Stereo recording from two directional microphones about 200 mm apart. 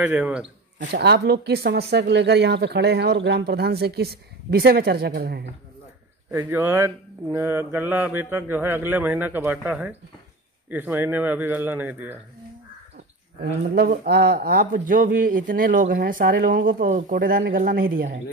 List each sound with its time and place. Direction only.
0.0 s speech: 5° right (ahead or behind)
0.7 s speech: 55° right (ahead or behind)
6.3 s speech: 10° right (ahead or behind)
13.4 s speech: 50° right (ahead or behind)